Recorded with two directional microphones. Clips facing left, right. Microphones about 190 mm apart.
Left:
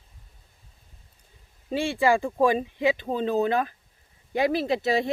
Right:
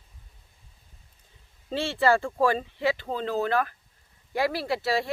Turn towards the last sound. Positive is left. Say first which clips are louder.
# left 3 dB
turn(degrees=20)  # may be behind; listen again after turning